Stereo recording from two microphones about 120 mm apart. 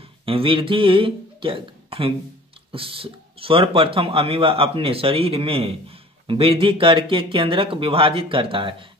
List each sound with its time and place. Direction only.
0.2 s speech: 50° right (ahead or behind)